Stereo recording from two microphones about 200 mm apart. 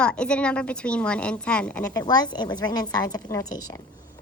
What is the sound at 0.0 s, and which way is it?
A child's voice, 5° left (ahead or behind).